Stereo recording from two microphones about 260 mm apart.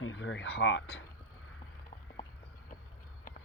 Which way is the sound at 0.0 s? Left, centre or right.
Left.